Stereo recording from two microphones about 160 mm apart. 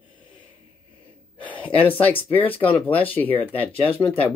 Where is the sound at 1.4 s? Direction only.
10° left (ahead or behind).